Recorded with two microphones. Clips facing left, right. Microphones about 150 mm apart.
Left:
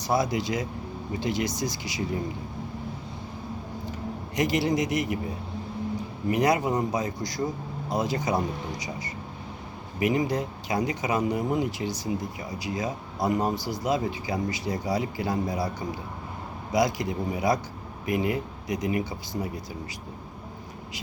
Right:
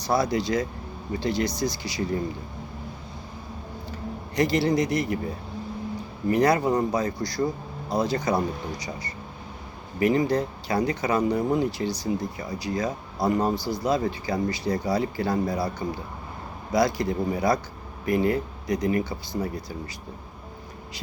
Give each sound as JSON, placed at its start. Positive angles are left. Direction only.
{"t": 0.1, "sound": "speech", "side_deg": 15}
{"t": 4.4, "sound": "speech", "side_deg": 15}
{"t": 6.2, "sound": "speech", "side_deg": 15}
{"t": 16.7, "sound": "speech", "side_deg": 15}